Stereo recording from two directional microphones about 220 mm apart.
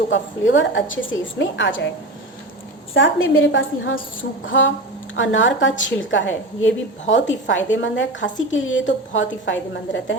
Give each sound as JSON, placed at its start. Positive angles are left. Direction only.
{"t": 0.1, "sound": "a woman's voice", "side_deg": 55}
{"t": 2.9, "sound": "a woman's voice", "side_deg": 60}